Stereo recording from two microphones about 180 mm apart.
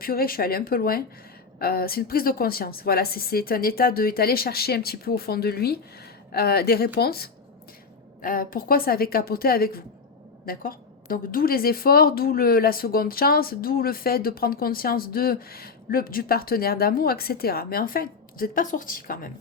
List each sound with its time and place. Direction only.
0.0 s a woman's voice: 55° left (ahead or behind)